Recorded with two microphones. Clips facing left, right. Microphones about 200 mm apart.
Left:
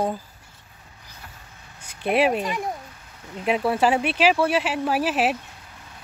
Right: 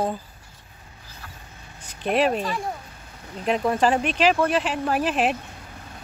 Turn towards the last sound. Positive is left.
turn(degrees=5)  # may be behind; listen again after turning